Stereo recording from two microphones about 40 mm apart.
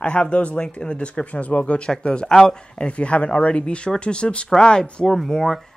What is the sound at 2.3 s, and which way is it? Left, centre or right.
Speech, centre.